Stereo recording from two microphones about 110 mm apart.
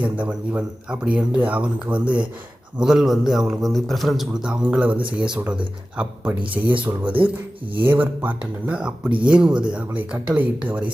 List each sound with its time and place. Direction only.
0.0 s a man's voice: 10° right (ahead or behind)
6.6 s speech: 15° right (ahead or behind)
7.0 s speech: 50° right (ahead or behind)
7.8 s speech: 15° right (ahead or behind)